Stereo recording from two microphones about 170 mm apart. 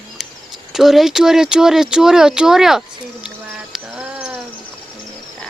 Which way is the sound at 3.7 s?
5° right (ahead or behind).